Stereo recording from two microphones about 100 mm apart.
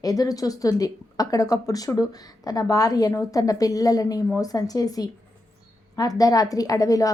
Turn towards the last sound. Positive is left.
turn(degrees=35)  # may be behind; listen again after turning